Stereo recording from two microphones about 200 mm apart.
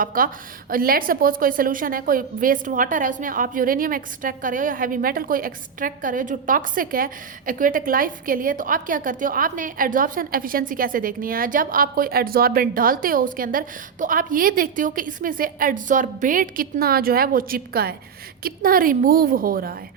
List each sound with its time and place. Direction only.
0.0 s a woman's voice: 45° right (ahead or behind)